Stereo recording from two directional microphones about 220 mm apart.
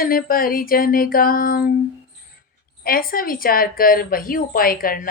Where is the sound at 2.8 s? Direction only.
40° left (ahead or behind).